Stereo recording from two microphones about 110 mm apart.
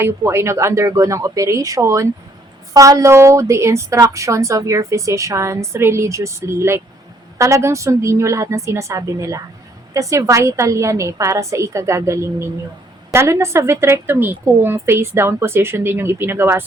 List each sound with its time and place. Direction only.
0.0 s a woman's voice: 25° right (ahead or behind)